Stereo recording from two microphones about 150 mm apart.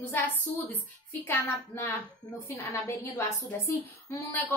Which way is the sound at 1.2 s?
15° left (ahead or behind).